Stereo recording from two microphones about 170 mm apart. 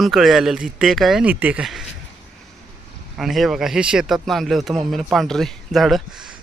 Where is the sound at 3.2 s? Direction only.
Centre (ahead or behind).